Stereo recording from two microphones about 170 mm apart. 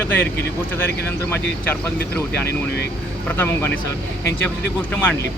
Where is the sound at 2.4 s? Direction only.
75° left (ahead or behind).